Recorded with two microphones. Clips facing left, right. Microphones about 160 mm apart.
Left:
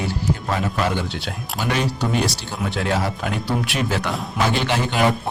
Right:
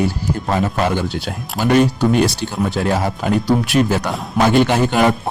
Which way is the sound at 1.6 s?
50° right (ahead or behind).